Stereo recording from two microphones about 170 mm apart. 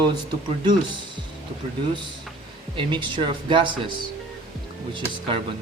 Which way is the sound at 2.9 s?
30° right (ahead or behind).